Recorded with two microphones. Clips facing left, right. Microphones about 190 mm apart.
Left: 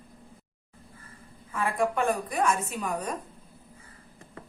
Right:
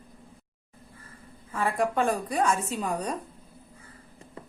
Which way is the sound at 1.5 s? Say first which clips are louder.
Right 1 dB; 30° right (ahead or behind).